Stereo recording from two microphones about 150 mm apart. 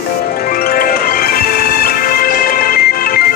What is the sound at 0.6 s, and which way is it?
Music, 80° left.